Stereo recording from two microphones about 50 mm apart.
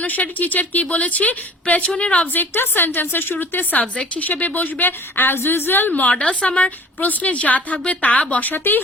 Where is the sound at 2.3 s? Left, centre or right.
Left.